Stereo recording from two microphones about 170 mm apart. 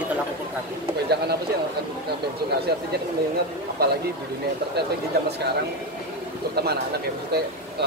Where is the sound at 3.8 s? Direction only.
70° right (ahead or behind).